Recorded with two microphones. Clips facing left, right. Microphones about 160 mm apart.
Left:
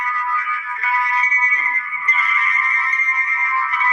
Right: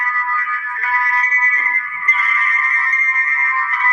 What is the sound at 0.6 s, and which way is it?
Music, 10° left (ahead or behind).